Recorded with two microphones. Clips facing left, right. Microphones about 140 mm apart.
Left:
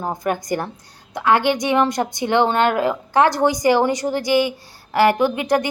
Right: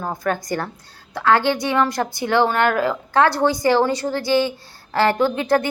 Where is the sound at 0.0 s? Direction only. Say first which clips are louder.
Left 1 dB; 20° left (ahead or behind).